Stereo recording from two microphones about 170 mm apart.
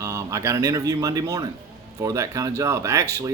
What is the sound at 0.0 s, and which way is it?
Speech, 20° right (ahead or behind).